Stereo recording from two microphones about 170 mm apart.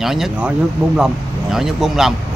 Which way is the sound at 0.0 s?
Centre (ahead or behind).